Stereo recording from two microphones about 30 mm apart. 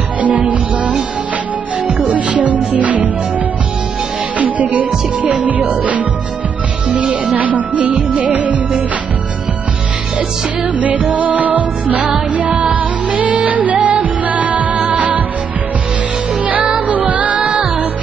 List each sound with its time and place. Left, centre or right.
0.2 s music: right
2.0 s music: right
4.4 s music: right
10.7 s music: right
16.8 s music: right